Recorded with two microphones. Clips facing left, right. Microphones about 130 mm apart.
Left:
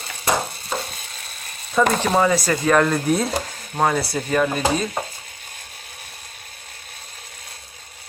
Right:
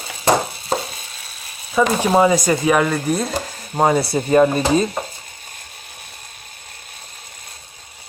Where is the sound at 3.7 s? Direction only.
20° right (ahead or behind).